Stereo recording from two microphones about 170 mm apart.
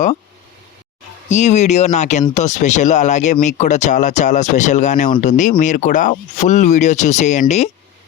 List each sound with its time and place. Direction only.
1.3 s speech: 40° left (ahead or behind)